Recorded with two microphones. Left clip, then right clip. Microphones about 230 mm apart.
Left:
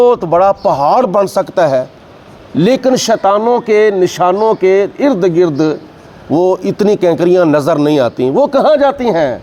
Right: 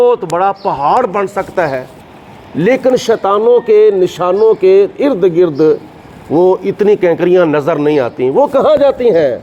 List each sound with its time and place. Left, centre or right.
0.0 s a man's voice: left
2.6 s speech: left
2.8 s a man's voice: left
7.8 s speech: left
8.4 s speech: left